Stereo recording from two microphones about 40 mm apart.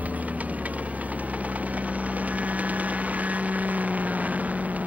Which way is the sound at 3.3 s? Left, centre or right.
Right.